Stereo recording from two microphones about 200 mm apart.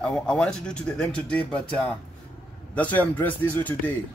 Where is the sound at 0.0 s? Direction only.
5° left (ahead or behind).